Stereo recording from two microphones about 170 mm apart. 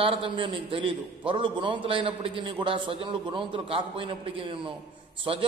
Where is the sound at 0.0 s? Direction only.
30° right (ahead or behind).